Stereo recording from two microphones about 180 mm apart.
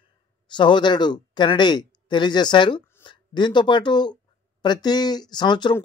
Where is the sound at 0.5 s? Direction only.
25° left (ahead or behind).